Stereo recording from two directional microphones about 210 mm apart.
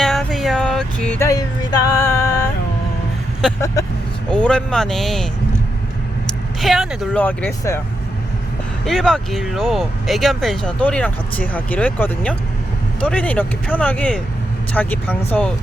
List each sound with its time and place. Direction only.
0.0 s music: centre (ahead or behind)
3.8 s vehicle: 15° left (ahead or behind)
4.3 s speech: 5° left (ahead or behind)
6.6 s speech: centre (ahead or behind)
8.8 s speech: centre (ahead or behind)